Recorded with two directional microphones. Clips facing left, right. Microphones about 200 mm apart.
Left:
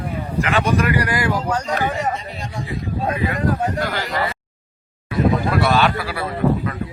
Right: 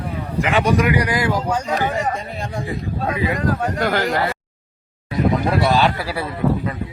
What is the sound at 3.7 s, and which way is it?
Speech, 55° right (ahead or behind).